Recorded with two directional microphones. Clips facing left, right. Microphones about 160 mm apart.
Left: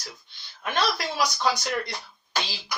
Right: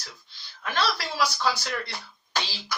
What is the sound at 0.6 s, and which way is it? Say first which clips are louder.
Speech: left 2 dB; 20° left (ahead or behind).